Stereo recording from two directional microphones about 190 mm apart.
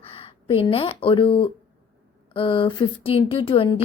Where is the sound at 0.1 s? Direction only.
30° left (ahead or behind).